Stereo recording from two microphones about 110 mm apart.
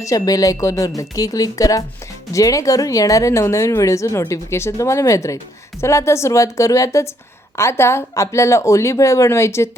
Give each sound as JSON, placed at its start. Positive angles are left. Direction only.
{"t": 0.0, "sound": "speech", "side_deg": 30}